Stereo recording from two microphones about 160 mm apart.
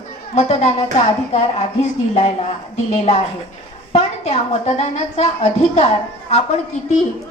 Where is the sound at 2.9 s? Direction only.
45° left (ahead or behind).